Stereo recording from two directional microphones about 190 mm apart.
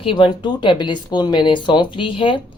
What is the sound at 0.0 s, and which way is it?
Speech, 25° left (ahead or behind).